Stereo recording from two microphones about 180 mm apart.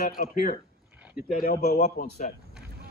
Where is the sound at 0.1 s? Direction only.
50° left (ahead or behind).